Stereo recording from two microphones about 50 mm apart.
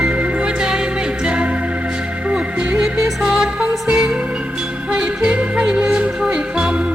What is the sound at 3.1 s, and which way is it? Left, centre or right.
Music, centre.